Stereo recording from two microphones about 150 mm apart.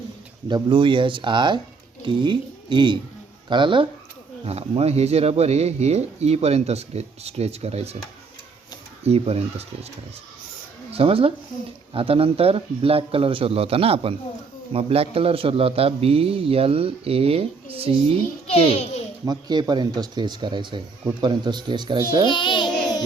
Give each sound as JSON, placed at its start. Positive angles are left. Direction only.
{"t": 0.4, "sound": "a man's voice", "side_deg": -30}
{"t": 9.0, "sound": "speech", "side_deg": -45}
{"t": 10.9, "sound": "a man's voice", "side_deg": -40}
{"t": 18.5, "sound": "a child's voice", "side_deg": 45}
{"t": 19.2, "sound": "speech", "side_deg": -30}
{"t": 22.3, "sound": "a sound", "side_deg": 30}